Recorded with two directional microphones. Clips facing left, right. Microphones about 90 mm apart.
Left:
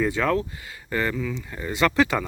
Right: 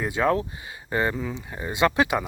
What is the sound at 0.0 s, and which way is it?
Speech, 15° right (ahead or behind).